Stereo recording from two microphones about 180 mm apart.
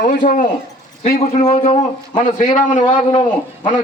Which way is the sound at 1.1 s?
40° left (ahead or behind).